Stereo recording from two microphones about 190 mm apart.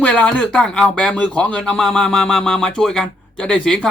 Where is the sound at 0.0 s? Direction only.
5° left (ahead or behind).